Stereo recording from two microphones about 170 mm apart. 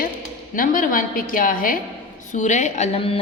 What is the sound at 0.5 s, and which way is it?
A woman's voice, 55° left (ahead or behind).